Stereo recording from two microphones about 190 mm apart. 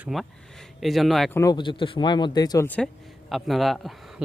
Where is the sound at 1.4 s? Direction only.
20° left (ahead or behind).